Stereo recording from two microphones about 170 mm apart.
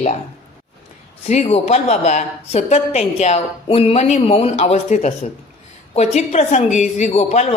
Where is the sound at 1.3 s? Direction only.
40° left (ahead or behind).